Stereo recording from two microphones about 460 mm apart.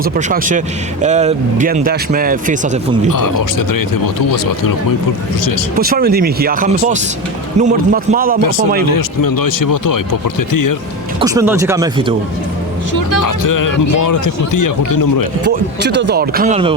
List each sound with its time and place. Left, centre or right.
0.0 s speech: centre
3.1 s speech: left
5.7 s speech: centre
8.4 s speech: left
11.2 s speech: centre
12.9 s a man's voice: left
15.2 s speech: right